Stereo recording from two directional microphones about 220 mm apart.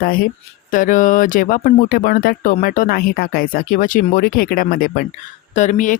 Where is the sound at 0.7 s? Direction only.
35° left (ahead or behind).